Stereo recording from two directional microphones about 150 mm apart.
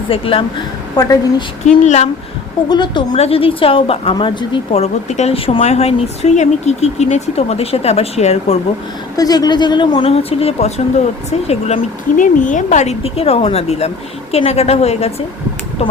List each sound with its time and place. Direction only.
0.1 s a woman's voice: 35° left (ahead or behind)
0.9 s a woman's voice: 25° left (ahead or behind)
1.6 s a woman's voice: 50° left (ahead or behind)
2.6 s a woman's voice: 30° left (ahead or behind)
3.1 s a woman's voice: 45° left (ahead or behind)
9.1 s a woman's voice: 25° left (ahead or behind); by 15.1 s 45° left (ahead or behind)